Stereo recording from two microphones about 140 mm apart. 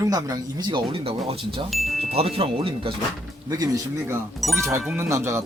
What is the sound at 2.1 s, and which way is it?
Speech, 45° right (ahead or behind).